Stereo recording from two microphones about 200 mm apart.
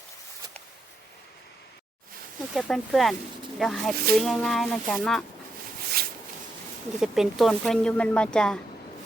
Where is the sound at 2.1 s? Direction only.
45° right (ahead or behind).